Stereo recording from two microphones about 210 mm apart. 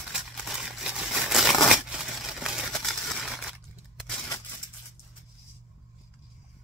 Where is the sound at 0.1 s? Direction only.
Centre (ahead or behind).